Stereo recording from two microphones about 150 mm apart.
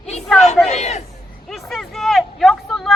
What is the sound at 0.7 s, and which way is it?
Speech, 50° left (ahead or behind).